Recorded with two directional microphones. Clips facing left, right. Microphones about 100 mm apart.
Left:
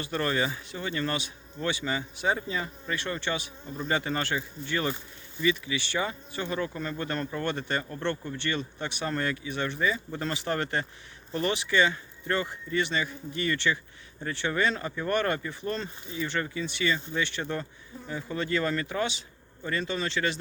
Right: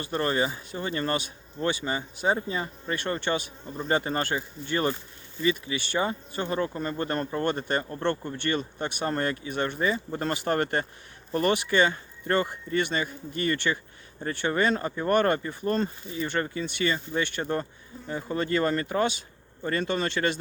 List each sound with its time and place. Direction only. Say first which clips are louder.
0.0 s speech: right 2 dB; 35° right (ahead or behind)
2.9 s speech: right 3 dB; 50° right (ahead or behind)
3.8 s speech: right 3 dB; 35° right (ahead or behind)
9.7 s speech: right 2 dB; 35° right (ahead or behind)
16.9 s speech: right 1 dB; 40° right (ahead or behind)